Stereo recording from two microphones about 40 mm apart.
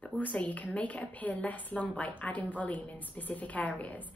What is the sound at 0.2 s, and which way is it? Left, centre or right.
A woman's voice, left.